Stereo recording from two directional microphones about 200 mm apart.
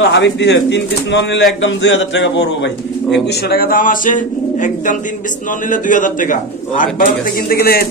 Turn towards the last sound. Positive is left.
turn(degrees=50)  # may be behind; listen again after turning